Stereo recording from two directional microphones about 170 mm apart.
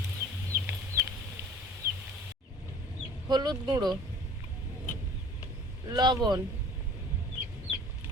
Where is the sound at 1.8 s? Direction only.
15° right (ahead or behind).